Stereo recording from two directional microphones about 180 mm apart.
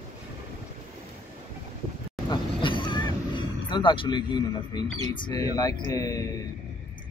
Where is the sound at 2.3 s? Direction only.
25° left (ahead or behind).